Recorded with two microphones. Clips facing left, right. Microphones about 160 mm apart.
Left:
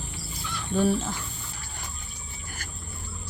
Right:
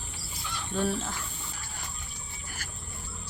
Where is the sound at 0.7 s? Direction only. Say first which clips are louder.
Left 6 dB; centre (ahead or behind).